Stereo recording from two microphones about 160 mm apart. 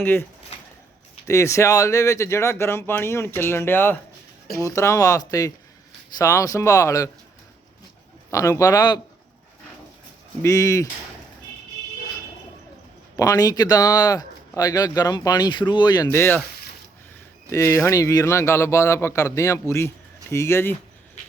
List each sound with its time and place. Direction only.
0.0 s speech: 15° left (ahead or behind)
1.3 s speech: 20° left (ahead or behind)
8.3 s speech: 20° left (ahead or behind)
10.4 s speech: 20° left (ahead or behind)
13.1 s speech: 20° left (ahead or behind)
16.1 s speech: 15° left (ahead or behind)
17.5 s speech: 20° left (ahead or behind)